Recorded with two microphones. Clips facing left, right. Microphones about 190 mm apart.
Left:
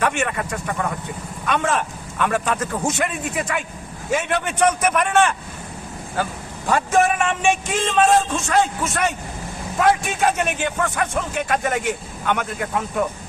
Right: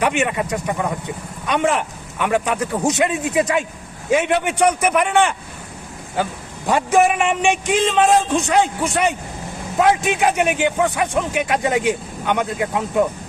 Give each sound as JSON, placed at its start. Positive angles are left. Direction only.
{"t": 0.0, "sound": "speech", "side_deg": -15}
{"t": 6.7, "sound": "speech", "side_deg": -15}